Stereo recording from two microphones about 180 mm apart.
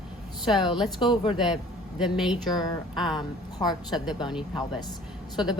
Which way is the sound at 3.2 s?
20° left (ahead or behind).